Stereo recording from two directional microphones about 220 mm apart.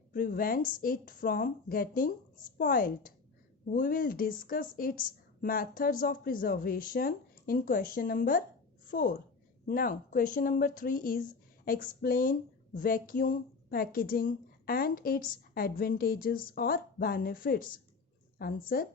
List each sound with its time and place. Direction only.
0.1 s a woman's voice: 40° left (ahead or behind)